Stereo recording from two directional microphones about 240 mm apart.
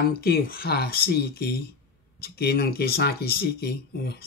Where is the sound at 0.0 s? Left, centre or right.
Left.